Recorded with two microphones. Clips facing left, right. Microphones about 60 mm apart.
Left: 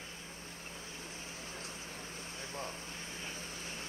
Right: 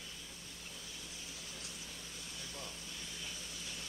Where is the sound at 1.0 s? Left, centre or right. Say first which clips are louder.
Left 4 dB; left.